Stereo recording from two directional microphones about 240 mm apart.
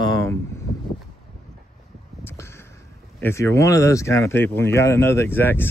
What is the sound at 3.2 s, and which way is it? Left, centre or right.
Speech, centre.